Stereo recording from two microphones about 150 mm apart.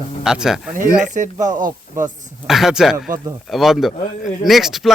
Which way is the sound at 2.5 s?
5° right (ahead or behind).